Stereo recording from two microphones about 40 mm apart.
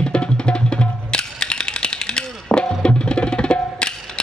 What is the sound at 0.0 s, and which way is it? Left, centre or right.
Music, left.